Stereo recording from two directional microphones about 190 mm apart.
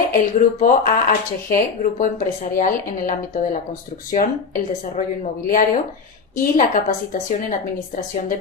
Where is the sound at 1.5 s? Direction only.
45° left (ahead or behind).